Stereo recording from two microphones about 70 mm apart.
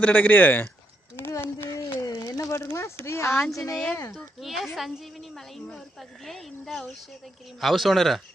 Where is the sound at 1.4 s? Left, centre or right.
Left.